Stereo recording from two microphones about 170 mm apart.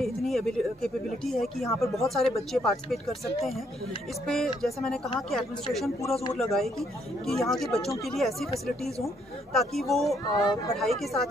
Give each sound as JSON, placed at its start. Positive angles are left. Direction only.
{"t": 0.0, "sound": "speech", "side_deg": 0}
{"t": 4.3, "sound": "speech", "side_deg": 0}
{"t": 10.3, "sound": "speech", "side_deg": 25}
{"t": 10.8, "sound": "speech", "side_deg": 0}